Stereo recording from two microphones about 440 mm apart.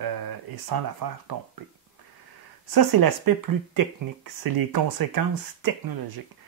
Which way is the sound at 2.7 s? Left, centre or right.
Right.